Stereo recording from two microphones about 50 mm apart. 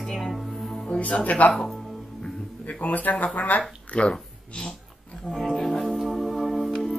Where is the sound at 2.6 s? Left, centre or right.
Left.